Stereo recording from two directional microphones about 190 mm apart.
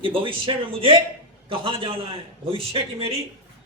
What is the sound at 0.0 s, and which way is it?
A man's voice, 25° right (ahead or behind).